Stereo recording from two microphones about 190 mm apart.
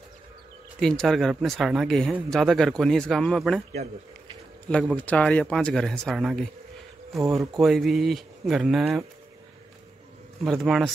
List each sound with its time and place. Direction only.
0.7 s speech: 5° left (ahead or behind)
3.7 s speech: 35° right (ahead or behind)
4.6 s speech: 5° left (ahead or behind)
7.2 s speech: 15° right (ahead or behind)
7.5 s speech: centre (ahead or behind)
10.4 s speech: centre (ahead or behind)